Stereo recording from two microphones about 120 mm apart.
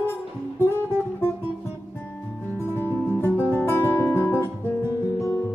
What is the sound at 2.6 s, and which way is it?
Music, 20° left (ahead or behind).